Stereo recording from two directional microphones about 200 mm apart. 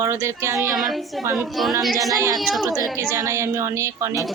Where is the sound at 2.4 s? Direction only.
Centre (ahead or behind).